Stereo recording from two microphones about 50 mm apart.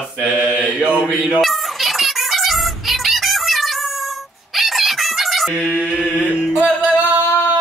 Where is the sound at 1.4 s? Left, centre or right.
Centre.